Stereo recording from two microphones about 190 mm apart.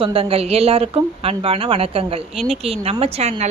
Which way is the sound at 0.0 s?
30° right (ahead or behind).